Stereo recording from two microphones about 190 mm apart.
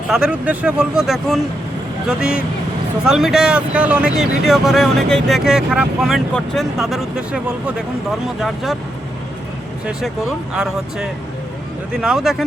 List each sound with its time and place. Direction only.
0.1 s speech: 5° right (ahead or behind)
10.5 s speech: 5° right (ahead or behind)